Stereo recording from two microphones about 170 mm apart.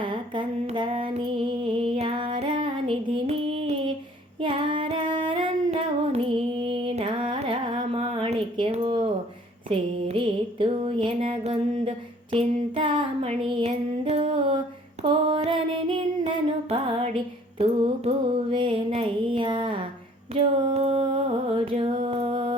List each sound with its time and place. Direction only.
0.0 s a sound: 30° right (ahead or behind)
4.4 s singing: 30° right (ahead or behind)
9.6 s a sound: 30° right (ahead or behind)
15.0 s female singing: 30° right (ahead or behind)
17.6 s mantra: 35° right (ahead or behind)
18.5 s music: 30° right (ahead or behind)